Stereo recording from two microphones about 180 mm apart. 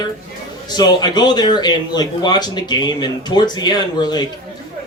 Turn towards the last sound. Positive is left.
turn(degrees=20)  # may be behind; listen again after turning